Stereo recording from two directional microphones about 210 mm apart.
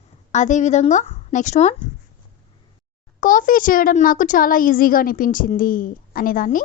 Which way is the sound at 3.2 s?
40° left (ahead or behind).